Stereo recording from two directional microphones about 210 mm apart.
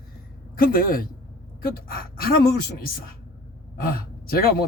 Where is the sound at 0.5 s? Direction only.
45° left (ahead or behind).